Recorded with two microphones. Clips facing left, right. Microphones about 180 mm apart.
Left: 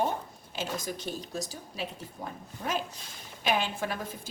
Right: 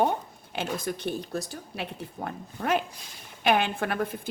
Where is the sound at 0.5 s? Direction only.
60° right (ahead or behind).